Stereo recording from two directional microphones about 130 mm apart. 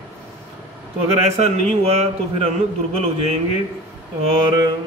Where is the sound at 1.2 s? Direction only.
55° right (ahead or behind).